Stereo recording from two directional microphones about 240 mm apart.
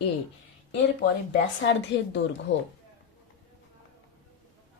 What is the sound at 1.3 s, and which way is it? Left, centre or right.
Speech, left.